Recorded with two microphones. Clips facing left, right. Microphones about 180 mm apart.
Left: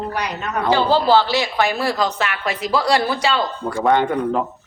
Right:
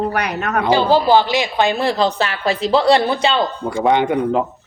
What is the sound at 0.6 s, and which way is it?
A woman's voice, 15° right (ahead or behind).